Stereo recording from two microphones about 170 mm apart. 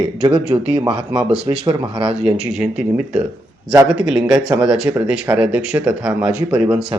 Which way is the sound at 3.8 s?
5° right (ahead or behind).